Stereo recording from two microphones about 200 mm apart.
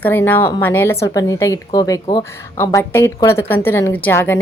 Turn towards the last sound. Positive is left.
turn(degrees=10)  # may be behind; listen again after turning